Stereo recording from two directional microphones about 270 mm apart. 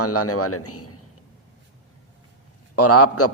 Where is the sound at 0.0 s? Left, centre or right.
Left.